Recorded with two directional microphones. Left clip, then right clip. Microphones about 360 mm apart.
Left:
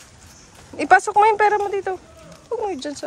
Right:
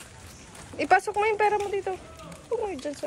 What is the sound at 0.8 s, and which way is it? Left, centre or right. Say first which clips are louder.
Speech: left 8 dB; centre.